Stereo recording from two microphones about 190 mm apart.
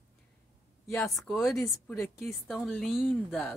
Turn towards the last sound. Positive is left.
turn(degrees=5)  # may be behind; listen again after turning